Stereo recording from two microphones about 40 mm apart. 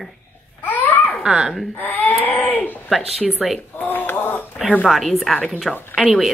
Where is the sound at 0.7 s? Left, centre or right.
Left.